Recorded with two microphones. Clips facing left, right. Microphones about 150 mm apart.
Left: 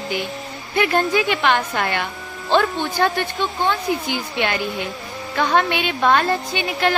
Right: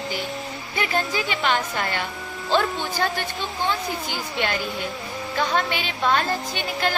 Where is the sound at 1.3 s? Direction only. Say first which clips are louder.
Left 4 dB; 75° left (ahead or behind).